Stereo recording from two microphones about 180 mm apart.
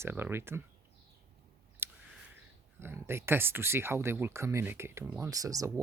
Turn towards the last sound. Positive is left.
turn(degrees=-20)  # may be behind; listen again after turning